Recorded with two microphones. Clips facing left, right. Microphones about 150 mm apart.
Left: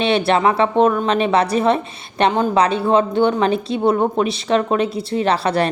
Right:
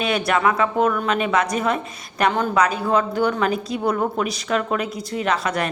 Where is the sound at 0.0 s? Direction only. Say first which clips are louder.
Left 4 dB; 30° left (ahead or behind).